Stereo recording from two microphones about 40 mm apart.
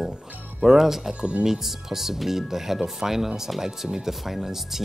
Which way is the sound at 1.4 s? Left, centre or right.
Centre.